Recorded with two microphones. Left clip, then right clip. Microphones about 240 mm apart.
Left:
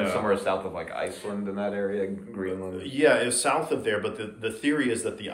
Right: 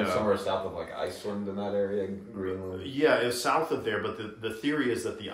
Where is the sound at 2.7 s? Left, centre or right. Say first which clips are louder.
Left 3 dB; centre.